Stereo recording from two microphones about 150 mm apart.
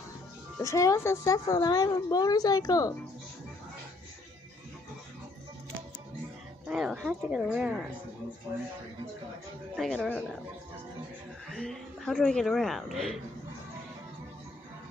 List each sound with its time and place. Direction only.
0.6 s a woman's voice: 20° left (ahead or behind)
6.7 s a man's voice: centre (ahead or behind)
9.8 s a man's voice: 5° left (ahead or behind)
11.4 s a man's voice: 5° left (ahead or behind)